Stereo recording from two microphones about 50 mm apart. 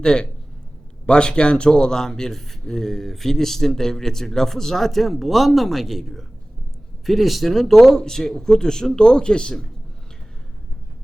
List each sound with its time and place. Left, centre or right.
0.0 s a man's voice: centre